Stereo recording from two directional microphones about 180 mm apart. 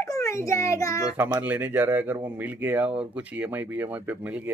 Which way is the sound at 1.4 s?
10° right (ahead or behind).